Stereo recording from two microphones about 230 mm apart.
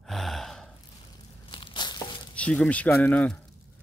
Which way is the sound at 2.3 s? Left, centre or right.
Centre.